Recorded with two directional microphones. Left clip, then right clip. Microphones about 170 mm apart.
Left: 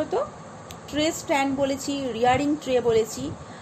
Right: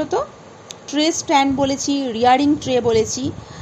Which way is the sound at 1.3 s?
35° right (ahead or behind).